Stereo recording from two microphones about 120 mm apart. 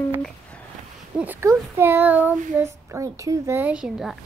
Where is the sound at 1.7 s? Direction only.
20° right (ahead or behind).